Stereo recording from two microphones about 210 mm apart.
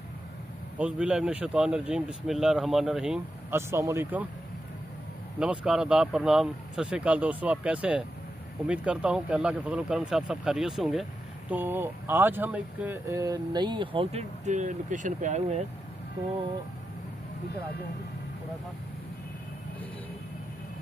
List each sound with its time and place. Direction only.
0.7 s speech: 5° right (ahead or behind)
5.4 s speech: 5° right (ahead or behind); by 15.6 s 35° right (ahead or behind)